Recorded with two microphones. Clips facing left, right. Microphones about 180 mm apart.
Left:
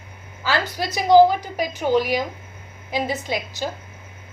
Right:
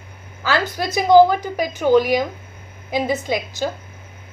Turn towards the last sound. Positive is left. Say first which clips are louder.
# right 4 dB
turn(degrees=-50)  # may be behind; listen again after turning